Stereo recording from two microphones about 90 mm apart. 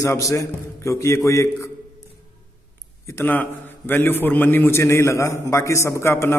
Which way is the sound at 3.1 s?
25° left (ahead or behind).